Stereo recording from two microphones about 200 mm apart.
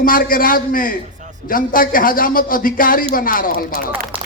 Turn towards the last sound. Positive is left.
turn(degrees=45)  # may be behind; listen again after turning